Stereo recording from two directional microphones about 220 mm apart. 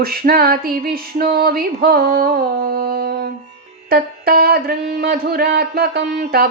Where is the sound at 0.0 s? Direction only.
45° right (ahead or behind).